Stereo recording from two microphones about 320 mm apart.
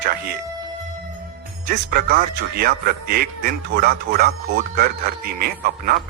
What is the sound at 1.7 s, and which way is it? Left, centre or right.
A man's voice, right.